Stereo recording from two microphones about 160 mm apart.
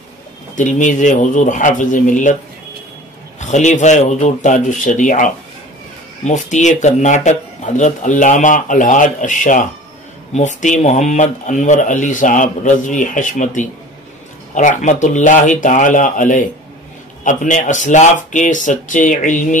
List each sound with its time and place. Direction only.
0.6 s speech: 50° left (ahead or behind)
3.3 s speech: 50° left (ahead or behind)